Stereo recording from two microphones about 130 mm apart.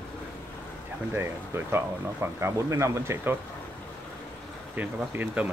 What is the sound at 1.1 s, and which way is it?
Speech, 20° right (ahead or behind).